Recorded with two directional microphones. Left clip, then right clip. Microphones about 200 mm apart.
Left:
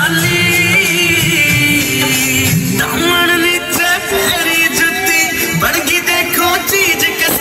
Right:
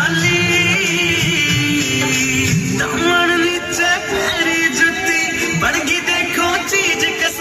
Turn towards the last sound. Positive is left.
turn(degrees=60)  # may be behind; listen again after turning